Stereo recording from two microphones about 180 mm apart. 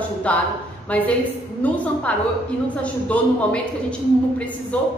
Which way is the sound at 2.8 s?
5° left (ahead or behind).